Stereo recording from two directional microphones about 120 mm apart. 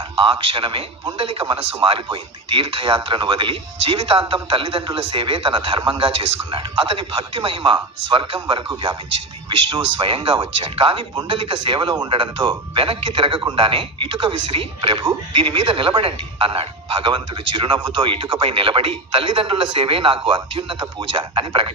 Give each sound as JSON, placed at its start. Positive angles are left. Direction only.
{"t": 0.2, "sound": "speech", "side_deg": -45}